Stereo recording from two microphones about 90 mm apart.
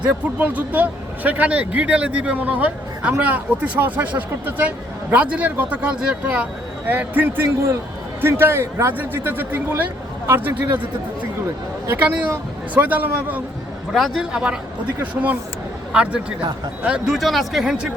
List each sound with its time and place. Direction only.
0.0 s a man's voice: 15° right (ahead or behind)
11.9 s a man's voice: 15° right (ahead or behind)
13.9 s a man's voice: centre (ahead or behind)
17.2 s speech: centre (ahead or behind)